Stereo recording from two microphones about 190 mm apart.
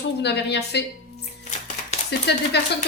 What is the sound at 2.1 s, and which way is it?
Speech, 65° left (ahead or behind).